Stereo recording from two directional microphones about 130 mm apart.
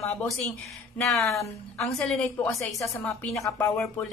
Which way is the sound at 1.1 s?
Centre (ahead or behind).